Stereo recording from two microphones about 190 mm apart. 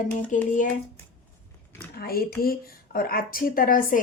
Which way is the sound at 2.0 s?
55° left (ahead or behind).